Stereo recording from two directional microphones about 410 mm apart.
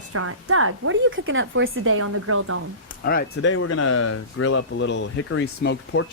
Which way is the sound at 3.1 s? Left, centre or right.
Left.